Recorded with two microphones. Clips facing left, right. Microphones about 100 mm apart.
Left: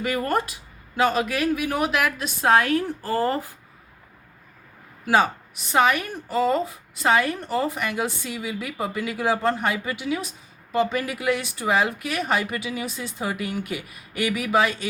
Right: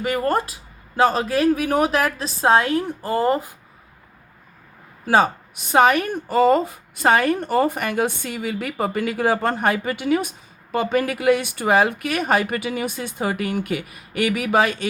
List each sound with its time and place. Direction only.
0.0 s a woman's voice: 25° right (ahead or behind)
5.0 s a woman's voice: 40° right (ahead or behind); by 14.8 s 55° right (ahead or behind)